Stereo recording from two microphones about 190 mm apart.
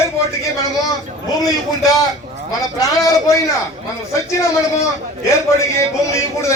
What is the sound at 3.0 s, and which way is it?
Speech, 20° left (ahead or behind).